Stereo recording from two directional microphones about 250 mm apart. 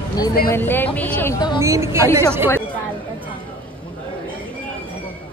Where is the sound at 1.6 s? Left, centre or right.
Centre.